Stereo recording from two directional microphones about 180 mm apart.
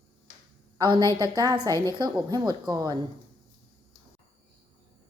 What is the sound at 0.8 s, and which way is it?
Speech, 25° right (ahead or behind).